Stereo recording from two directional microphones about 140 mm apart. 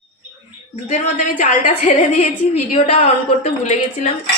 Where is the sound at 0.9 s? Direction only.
60° left (ahead or behind).